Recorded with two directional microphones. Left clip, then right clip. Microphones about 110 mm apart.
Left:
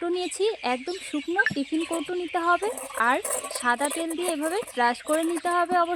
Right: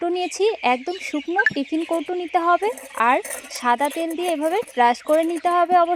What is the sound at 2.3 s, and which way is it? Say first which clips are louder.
Speech: right 6 dB; 30° right (ahead or behind).